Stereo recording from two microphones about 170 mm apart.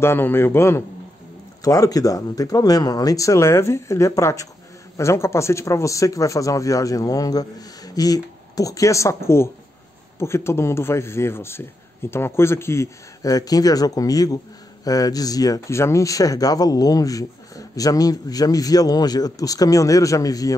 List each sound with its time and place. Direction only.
0.0 s a man's voice: 15° left (ahead or behind)